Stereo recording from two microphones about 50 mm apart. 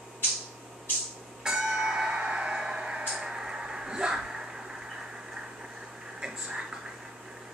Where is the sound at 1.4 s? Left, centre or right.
Centre.